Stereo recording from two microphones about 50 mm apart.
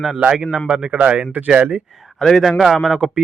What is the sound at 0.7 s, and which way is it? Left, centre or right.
Speech, right.